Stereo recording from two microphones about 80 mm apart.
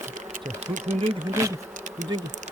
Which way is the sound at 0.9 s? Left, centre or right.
Right.